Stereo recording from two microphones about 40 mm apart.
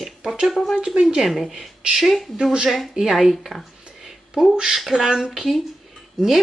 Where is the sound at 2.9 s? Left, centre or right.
Centre.